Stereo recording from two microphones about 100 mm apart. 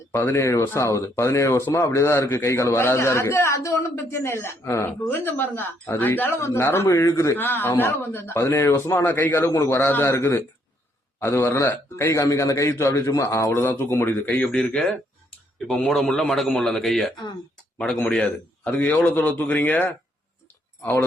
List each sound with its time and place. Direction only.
0.3 s speech: 30° left (ahead or behind)
13.5 s a man's voice: 20° left (ahead or behind)